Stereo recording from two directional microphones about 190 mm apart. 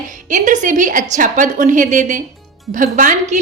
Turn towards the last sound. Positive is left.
turn(degrees=-45)  # may be behind; listen again after turning